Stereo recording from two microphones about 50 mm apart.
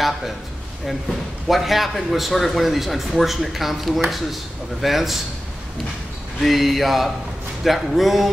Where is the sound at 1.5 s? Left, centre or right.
Centre.